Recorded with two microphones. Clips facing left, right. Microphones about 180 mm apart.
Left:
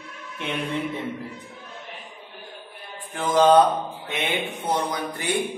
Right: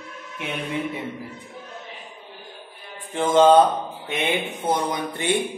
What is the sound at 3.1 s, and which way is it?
A man's voice, 25° right (ahead or behind).